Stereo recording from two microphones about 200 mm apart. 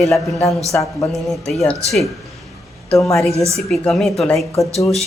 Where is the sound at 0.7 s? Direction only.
15° left (ahead or behind).